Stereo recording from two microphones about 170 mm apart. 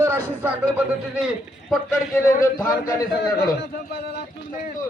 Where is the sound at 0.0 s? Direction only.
10° right (ahead or behind).